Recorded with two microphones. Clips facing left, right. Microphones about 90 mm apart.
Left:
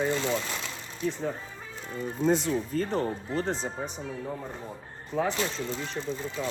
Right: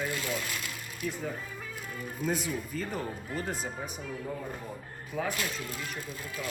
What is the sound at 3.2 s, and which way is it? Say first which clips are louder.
Speech: left 5 dB; 30° left (ahead or behind).